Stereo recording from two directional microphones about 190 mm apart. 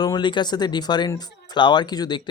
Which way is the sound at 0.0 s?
20° left (ahead or behind).